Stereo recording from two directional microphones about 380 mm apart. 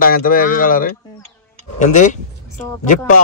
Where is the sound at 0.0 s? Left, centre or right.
Left.